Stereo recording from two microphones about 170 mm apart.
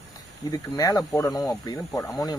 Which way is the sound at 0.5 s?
20° left (ahead or behind).